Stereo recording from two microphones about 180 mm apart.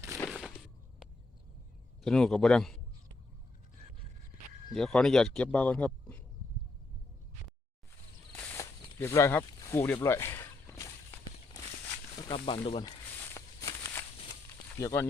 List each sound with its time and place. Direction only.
0.3 s a sound: centre (ahead or behind)
2.0 s speech: 5° left (ahead or behind)
4.7 s speech: 5° left (ahead or behind)
8.3 s zipper: 10° left (ahead or behind)
12.1 s speech: 30° left (ahead or behind)
12.8 s snake: 15° left (ahead or behind)
14.8 s speech: 20° left (ahead or behind)